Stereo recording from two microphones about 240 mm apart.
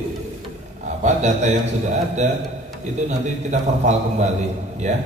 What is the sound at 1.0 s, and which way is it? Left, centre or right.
A man's voice, right.